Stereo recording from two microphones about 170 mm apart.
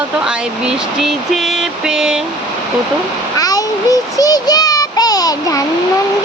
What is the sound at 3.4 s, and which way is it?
Child singing, 20° left (ahead or behind).